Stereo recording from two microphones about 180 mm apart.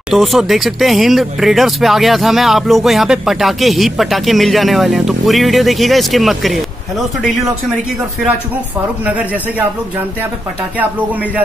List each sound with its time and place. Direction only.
0.1 s speech: centre (ahead or behind)
9.0 s speech: 10° right (ahead or behind)